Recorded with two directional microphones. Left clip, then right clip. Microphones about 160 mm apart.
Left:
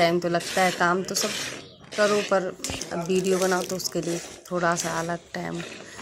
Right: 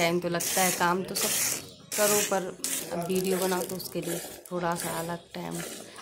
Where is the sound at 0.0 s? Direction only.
20° left (ahead or behind).